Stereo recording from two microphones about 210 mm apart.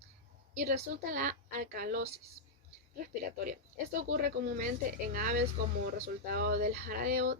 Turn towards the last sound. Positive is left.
turn(degrees=-45)  # may be behind; listen again after turning